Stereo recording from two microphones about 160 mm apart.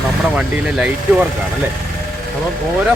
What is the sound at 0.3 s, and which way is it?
Speech, 10° right (ahead or behind).